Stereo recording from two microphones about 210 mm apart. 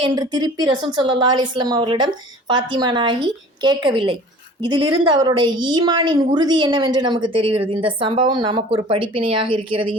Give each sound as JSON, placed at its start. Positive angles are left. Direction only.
{"t": 0.0, "sound": "a woman's voice", "side_deg": -20}